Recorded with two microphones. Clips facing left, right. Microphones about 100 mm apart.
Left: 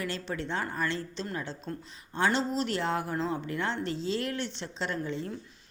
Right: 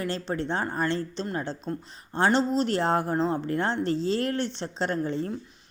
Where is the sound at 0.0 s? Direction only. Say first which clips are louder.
Right 5 dB; 35° right (ahead or behind).